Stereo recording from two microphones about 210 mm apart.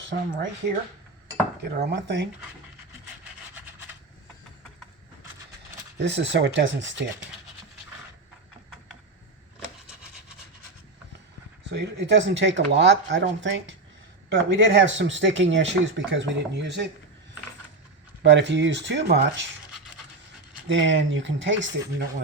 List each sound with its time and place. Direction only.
0.0 s speech: 60° right (ahead or behind)
1.7 s speech: 50° right (ahead or behind)
6.0 s speech: 55° right (ahead or behind)
11.7 s speech: 55° right (ahead or behind)
18.2 s speech: 55° right (ahead or behind)
20.9 s speech: 60° right (ahead or behind)